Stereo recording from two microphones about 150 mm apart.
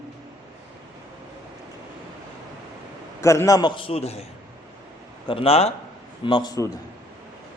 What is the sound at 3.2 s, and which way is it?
Speech, 20° left (ahead or behind).